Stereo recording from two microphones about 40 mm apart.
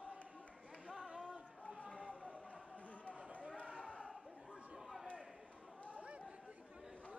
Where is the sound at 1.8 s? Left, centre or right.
Left.